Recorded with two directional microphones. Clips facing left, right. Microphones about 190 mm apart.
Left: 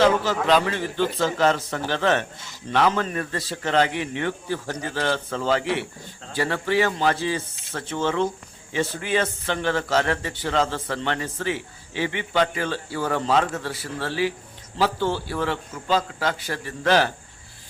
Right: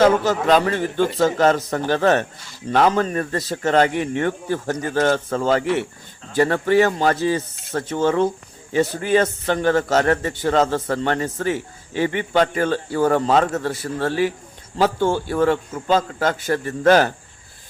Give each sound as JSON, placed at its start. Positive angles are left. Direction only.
{"t": 0.0, "sound": "a man's voice", "side_deg": -45}